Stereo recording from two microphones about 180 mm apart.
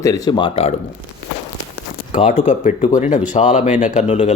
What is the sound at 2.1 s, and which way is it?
Speech, 45° left (ahead or behind).